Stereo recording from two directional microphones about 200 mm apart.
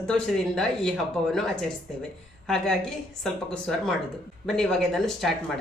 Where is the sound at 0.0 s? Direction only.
5° left (ahead or behind).